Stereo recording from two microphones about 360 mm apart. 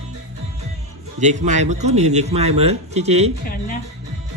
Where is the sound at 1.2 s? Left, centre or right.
Centre.